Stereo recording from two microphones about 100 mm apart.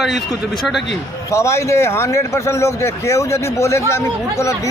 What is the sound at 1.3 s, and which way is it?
A man's voice, 30° left (ahead or behind).